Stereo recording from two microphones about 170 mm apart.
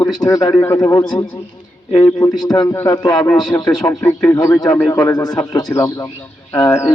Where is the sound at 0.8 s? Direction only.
25° left (ahead or behind).